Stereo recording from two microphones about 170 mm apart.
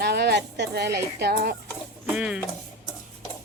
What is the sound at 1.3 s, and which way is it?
Speech, 60° right (ahead or behind).